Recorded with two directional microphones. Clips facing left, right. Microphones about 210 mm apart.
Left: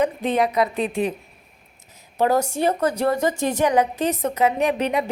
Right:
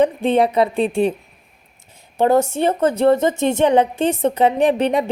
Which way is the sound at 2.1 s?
25° right (ahead or behind).